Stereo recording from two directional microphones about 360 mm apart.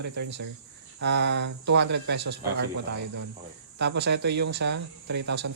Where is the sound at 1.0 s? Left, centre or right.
Right.